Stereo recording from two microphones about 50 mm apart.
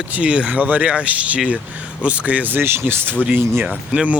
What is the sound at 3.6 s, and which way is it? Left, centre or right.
Speech, right.